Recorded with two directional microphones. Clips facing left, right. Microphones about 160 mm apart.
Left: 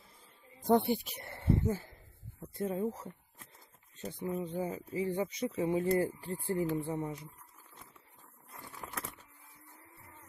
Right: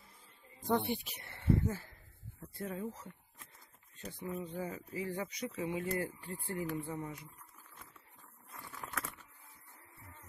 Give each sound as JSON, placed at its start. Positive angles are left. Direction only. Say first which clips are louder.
{"t": 0.7, "sound": "speech", "louder": "left 6 dB", "side_deg": 40}
{"t": 1.7, "sound": "speech", "louder": "left 6 dB", "side_deg": 20}
{"t": 3.9, "sound": "speech", "louder": "left 5 dB", "side_deg": 25}